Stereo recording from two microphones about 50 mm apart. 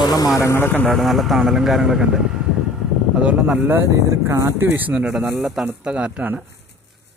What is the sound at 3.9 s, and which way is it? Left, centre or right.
Speech, right.